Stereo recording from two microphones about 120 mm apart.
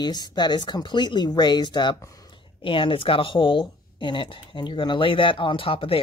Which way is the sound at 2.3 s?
45° left (ahead or behind).